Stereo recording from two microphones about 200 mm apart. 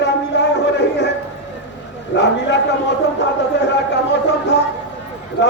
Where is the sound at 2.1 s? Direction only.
60° left (ahead or behind).